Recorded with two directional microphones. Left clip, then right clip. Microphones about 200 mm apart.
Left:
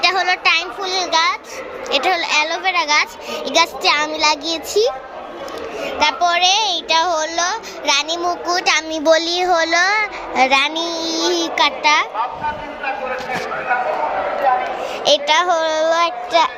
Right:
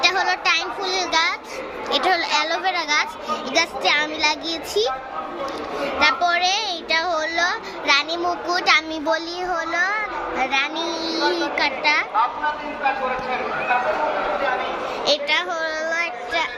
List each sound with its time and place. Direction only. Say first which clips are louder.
0.0 s a sound: left 4 dB; 20° left (ahead or behind)
1.9 s a woman's voice: left 3 dB; 10° left (ahead or behind)
15.0 s a child's voice: left 7 dB; 30° left (ahead or behind)